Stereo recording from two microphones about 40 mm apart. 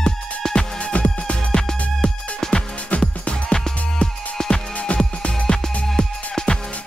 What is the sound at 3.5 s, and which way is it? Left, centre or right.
Music, centre.